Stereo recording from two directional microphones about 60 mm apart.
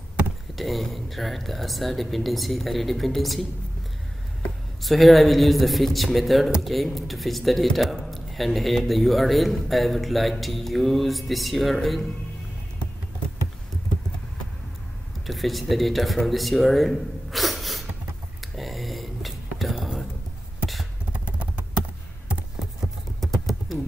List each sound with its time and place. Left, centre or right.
0.6 s speech: centre
4.8 s speech: centre
15.2 s speech: centre
18.4 s a sound: centre
21.1 s a sound: right
23.2 s typing: centre